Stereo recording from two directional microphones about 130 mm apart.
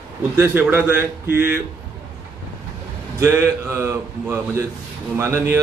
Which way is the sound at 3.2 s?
15° right (ahead or behind).